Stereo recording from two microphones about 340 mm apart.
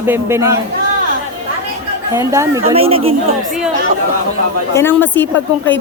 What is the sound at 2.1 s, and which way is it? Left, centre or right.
Speech, centre.